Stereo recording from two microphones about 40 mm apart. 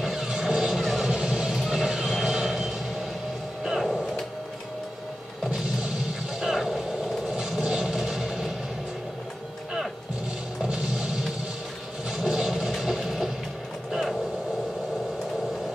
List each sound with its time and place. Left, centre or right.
0.0 s vehicle: centre
3.6 s a sound: centre
6.4 s vehicle: centre
10.6 s music: centre
12.1 s vehicle: centre